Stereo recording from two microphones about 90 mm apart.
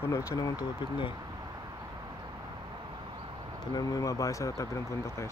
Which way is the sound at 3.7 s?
45° left (ahead or behind).